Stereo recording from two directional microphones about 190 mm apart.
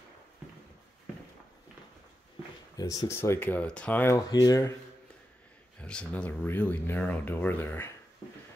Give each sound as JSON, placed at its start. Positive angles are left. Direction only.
{"t": 2.8, "sound": "speech", "side_deg": 20}
{"t": 5.8, "sound": "speech", "side_deg": 5}